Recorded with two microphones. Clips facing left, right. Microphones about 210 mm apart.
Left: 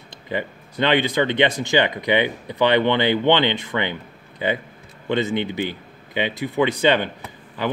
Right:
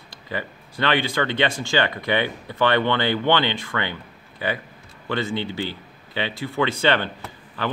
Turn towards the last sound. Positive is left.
turn(degrees=15)  # may be behind; listen again after turning